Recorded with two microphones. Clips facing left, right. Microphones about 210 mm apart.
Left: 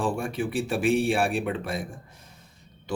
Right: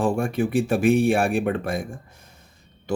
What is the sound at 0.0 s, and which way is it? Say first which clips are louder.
Speech: right 5 dB; 50° right (ahead or behind).